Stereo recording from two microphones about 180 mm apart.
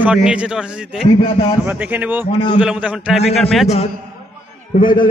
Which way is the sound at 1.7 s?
10° right (ahead or behind).